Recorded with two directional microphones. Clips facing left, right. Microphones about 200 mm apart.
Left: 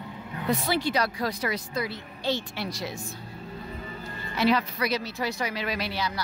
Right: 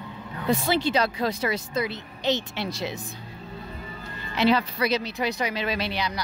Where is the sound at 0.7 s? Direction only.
25° right (ahead or behind).